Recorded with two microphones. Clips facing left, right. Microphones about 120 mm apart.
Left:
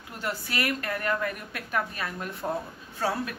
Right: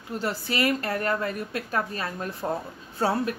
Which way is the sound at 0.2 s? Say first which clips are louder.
Right 4 dB; 25° right (ahead or behind).